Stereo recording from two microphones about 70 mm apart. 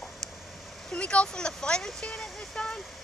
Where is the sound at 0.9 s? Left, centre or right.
Centre.